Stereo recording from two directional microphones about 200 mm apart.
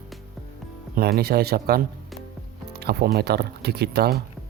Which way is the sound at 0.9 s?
50° right (ahead or behind).